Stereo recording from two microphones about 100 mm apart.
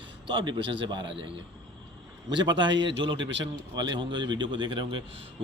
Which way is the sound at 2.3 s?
50° right (ahead or behind).